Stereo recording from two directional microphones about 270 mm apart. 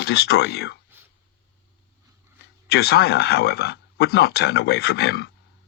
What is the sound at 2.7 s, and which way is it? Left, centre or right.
Speech, left.